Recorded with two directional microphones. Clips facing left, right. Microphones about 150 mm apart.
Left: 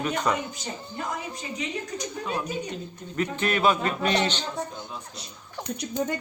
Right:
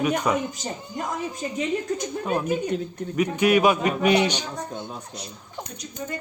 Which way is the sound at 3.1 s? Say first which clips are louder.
Right 7 dB; 10° right (ahead or behind).